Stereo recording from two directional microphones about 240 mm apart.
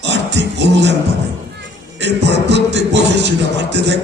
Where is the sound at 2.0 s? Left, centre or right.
Right.